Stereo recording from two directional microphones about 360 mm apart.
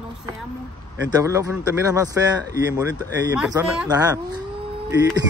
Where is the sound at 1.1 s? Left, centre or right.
Centre.